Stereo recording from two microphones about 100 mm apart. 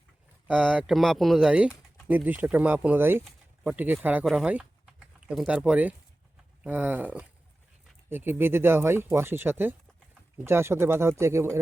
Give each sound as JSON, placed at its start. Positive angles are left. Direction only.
{"t": 0.4, "sound": "speech", "side_deg": -10}
{"t": 4.4, "sound": "typing", "side_deg": -15}
{"t": 5.5, "sound": "speech", "side_deg": -10}